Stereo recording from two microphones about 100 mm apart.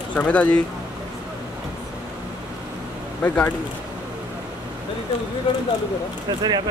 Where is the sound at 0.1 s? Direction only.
15° left (ahead or behind).